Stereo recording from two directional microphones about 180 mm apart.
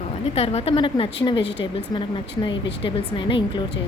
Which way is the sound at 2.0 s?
25° left (ahead or behind).